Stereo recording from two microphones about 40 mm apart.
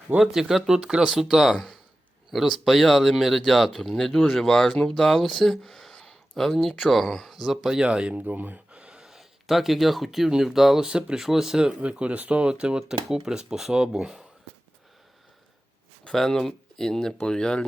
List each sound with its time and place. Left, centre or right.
0.2 s speech: centre
7.9 s speech: right
8.2 s speech: right
8.7 s a sound: right
9.5 s speech: centre
11.8 s speech: right; by 14.3 s centre
16.1 s speech: centre